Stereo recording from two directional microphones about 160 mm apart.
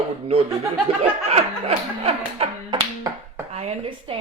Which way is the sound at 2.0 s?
35° right (ahead or behind).